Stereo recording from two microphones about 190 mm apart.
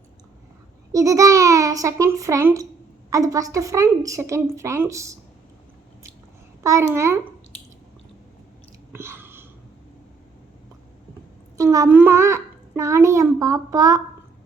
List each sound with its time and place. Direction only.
0.9 s a child's voice: 15° right (ahead or behind)
6.6 s a child's voice: 15° right (ahead or behind)
8.9 s chewing: 10° right (ahead or behind)
11.5 s a child's voice: 15° right (ahead or behind)